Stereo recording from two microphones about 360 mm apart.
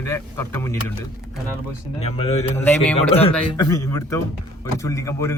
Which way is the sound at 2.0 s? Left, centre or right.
Centre.